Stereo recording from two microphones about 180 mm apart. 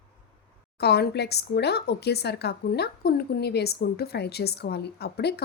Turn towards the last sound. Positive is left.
turn(degrees=65)  # may be behind; listen again after turning